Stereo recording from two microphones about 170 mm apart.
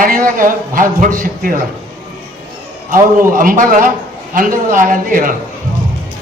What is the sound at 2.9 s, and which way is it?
A man's voice, 55° right (ahead or behind).